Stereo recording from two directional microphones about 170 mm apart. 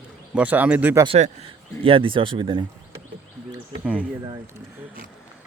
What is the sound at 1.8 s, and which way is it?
Speech, 30° right (ahead or behind).